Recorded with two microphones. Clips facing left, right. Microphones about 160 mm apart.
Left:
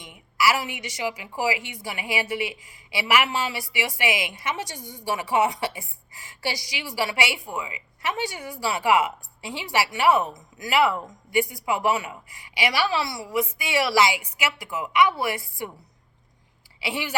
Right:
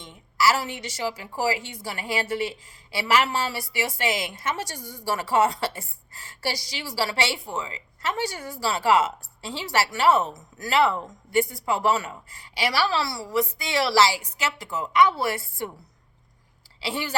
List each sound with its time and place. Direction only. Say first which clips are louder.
0.0 s a woman's voice: right 1 dB; 15° left (ahead or behind)
16.8 s a woman's voice: even; 15° left (ahead or behind)